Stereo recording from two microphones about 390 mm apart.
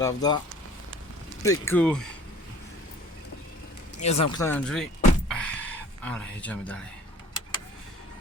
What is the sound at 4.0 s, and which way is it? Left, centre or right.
Speech, centre.